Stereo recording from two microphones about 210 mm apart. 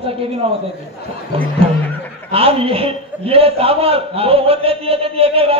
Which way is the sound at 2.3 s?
25° right (ahead or behind).